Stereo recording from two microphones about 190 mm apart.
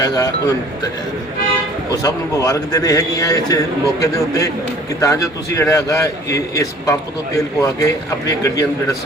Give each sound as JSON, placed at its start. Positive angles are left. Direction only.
{"t": 0.0, "sound": "speech", "side_deg": 20}
{"t": 1.9, "sound": "a man's voice", "side_deg": 20}